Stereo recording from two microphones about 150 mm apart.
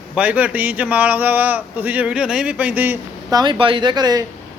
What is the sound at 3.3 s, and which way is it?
Speech, 30° right (ahead or behind).